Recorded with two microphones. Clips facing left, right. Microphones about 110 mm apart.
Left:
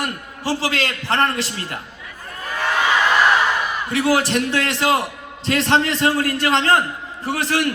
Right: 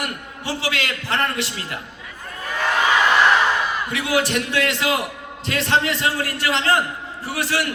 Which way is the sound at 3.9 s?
30° left (ahead or behind).